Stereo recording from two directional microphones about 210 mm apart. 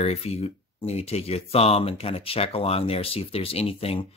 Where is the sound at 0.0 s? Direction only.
30° left (ahead or behind).